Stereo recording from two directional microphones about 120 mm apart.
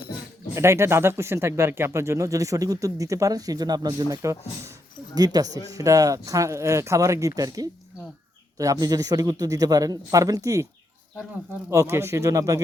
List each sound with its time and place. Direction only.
0.5 s speech: 20° right (ahead or behind)
11.7 s speech: 25° right (ahead or behind)